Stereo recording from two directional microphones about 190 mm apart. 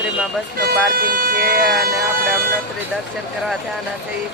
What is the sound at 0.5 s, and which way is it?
Speech, 50° right (ahead or behind).